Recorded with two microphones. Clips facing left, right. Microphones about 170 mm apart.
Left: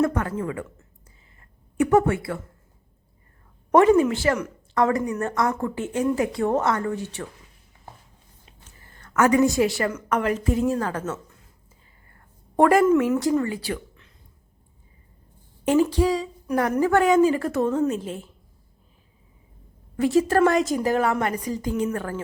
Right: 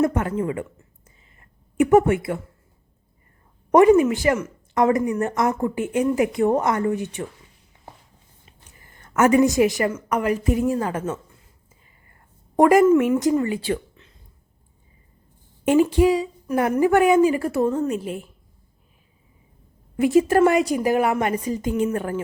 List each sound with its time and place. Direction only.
0.0 s speech: 20° right (ahead or behind)
1.8 s speech: 20° right (ahead or behind)
3.7 s a woman's voice: 15° right (ahead or behind)
8.9 s a woman's voice: 20° right (ahead or behind)
12.5 s a woman's voice: 10° right (ahead or behind)
15.6 s a woman's voice: 15° right (ahead or behind)
20.0 s a woman's voice: 15° right (ahead or behind)